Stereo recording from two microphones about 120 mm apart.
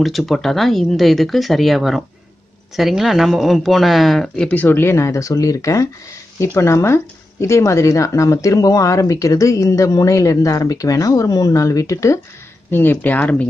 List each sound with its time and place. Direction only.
0.0 s speech: centre (ahead or behind)